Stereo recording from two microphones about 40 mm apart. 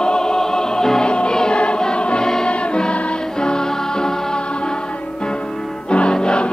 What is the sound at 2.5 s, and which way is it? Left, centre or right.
Music, left.